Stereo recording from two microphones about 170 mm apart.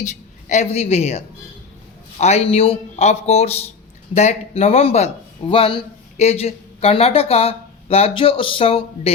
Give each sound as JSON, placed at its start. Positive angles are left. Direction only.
{"t": 0.0, "sound": "a woman's voice", "side_deg": 45}